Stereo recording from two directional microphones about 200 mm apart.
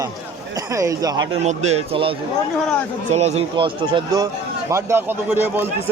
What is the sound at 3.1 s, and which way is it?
Speech, 35° right (ahead or behind).